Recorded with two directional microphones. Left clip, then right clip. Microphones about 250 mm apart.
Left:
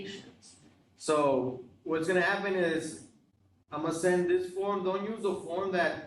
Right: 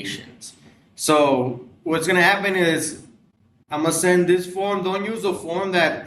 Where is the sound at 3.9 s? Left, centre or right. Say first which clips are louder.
Right 10 dB; right.